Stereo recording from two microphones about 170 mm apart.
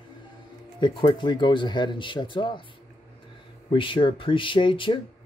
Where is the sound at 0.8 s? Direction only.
25° left (ahead or behind).